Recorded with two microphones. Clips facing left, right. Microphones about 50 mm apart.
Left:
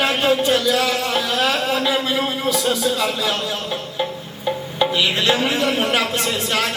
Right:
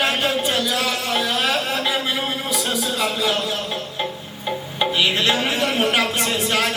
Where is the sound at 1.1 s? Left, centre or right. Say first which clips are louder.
Right 1 dB; centre.